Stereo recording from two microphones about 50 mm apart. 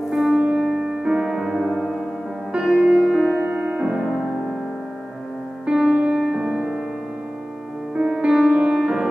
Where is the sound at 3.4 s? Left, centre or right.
Right.